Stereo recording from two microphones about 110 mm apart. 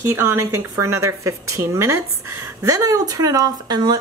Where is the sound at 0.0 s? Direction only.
25° right (ahead or behind).